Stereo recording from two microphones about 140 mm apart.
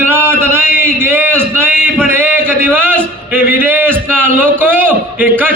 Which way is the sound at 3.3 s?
15° right (ahead or behind).